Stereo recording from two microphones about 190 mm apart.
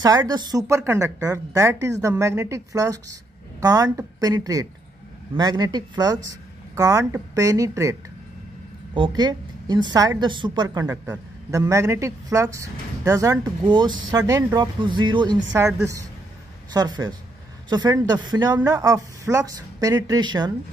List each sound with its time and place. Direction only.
0.0 s a woman's voice: 20° right (ahead or behind)